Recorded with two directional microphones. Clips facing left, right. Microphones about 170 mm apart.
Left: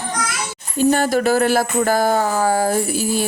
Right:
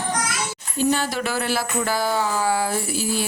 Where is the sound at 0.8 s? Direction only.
50° left (ahead or behind).